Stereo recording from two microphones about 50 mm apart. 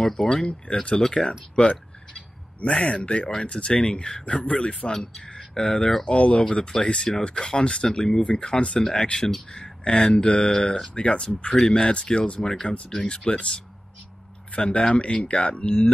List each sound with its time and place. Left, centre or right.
0.0 s speech: centre
6.0 s speech: left